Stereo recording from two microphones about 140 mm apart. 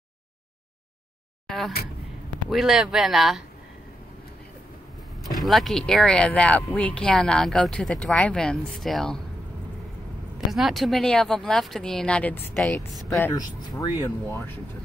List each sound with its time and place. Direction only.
2.5 s speech: 5° right (ahead or behind)
5.4 s speech: centre (ahead or behind)
10.5 s speech: centre (ahead or behind)
12.5 s speech: centre (ahead or behind)
13.3 s speech: 25° left (ahead or behind)